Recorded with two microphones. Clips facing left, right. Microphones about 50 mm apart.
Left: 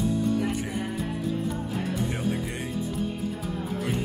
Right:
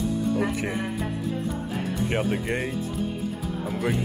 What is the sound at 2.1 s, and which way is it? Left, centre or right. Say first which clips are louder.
Speech: right 3 dB; right.